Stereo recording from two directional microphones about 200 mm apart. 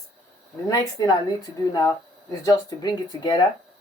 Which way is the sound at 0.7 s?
20° left (ahead or behind).